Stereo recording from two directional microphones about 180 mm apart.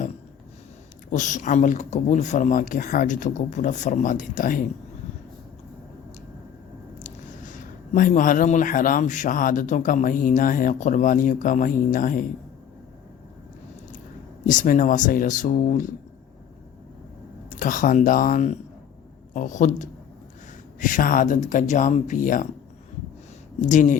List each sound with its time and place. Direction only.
1.1 s a man's voice: 45° left (ahead or behind)
7.0 s a man's voice: 45° left (ahead or behind)
14.4 s a man's voice: 45° left (ahead or behind)
17.5 s a man's voice: 45° left (ahead or behind)
23.6 s a man's voice: 45° left (ahead or behind)